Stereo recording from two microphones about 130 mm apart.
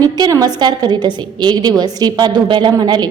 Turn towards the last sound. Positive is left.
turn(degrees=-30)  # may be behind; listen again after turning